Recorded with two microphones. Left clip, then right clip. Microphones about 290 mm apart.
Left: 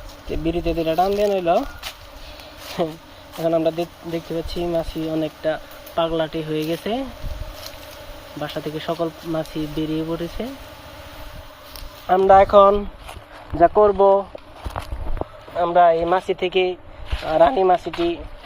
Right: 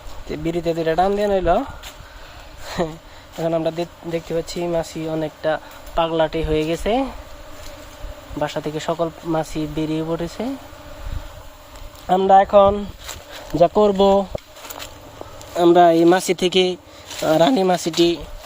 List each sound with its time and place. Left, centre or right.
0.3 s speech: centre
2.8 s speech: centre
8.4 s speech: centre
12.0 s speech: right
13.6 s speech: right
15.5 s speech: right